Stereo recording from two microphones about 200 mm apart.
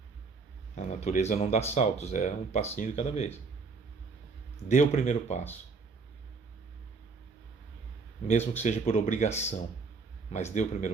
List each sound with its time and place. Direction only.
0.8 s speech: 35° left (ahead or behind)
4.7 s speech: 35° left (ahead or behind)
8.3 s speech: 35° left (ahead or behind)